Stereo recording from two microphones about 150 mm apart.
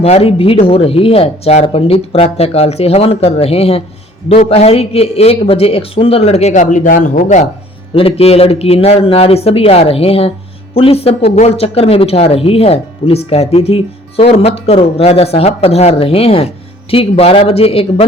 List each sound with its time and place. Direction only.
0.0 s a man's voice: 40° left (ahead or behind)
7.9 s speech: 40° left (ahead or behind)